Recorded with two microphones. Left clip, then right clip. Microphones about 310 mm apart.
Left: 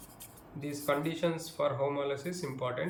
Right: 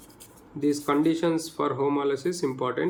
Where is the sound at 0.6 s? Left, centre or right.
Centre.